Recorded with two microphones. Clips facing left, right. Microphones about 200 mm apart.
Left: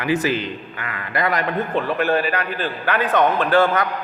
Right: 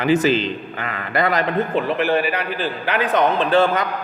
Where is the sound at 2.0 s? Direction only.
10° right (ahead or behind).